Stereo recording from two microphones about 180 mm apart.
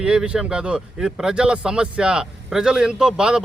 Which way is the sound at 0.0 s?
5° right (ahead or behind).